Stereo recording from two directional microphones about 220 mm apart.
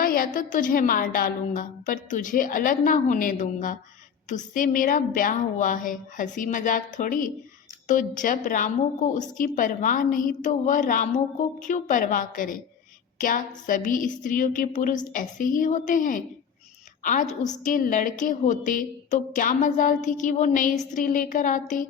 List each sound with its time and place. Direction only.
0.0 s a woman's voice: 40° left (ahead or behind)